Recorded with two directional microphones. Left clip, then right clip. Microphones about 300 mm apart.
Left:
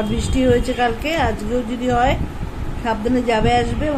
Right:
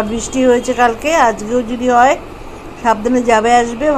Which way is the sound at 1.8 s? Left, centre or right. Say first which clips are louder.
Right 8 dB; centre.